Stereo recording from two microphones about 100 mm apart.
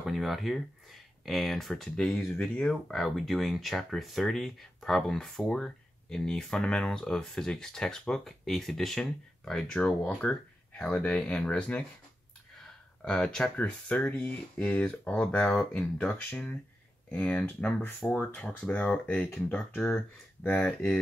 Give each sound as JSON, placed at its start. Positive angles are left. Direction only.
{"t": 0.0, "sound": "speech", "side_deg": 0}
{"t": 12.5, "sound": "a sound", "side_deg": 5}
{"t": 13.6, "sound": "speech", "side_deg": 15}